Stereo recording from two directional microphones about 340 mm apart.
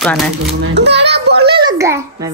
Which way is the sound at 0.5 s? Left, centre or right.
Right.